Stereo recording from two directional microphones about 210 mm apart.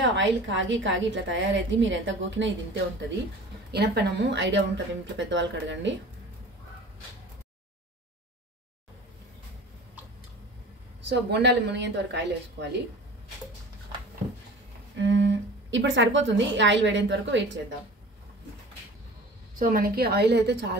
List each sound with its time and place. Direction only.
0.0 s a woman's voice: 65° right (ahead or behind)
3.7 s a woman's voice: 50° right (ahead or behind)
11.1 s a woman's voice: 55° right (ahead or behind)
15.0 s a woman's voice: 60° right (ahead or behind)
19.6 s a woman's voice: 40° right (ahead or behind)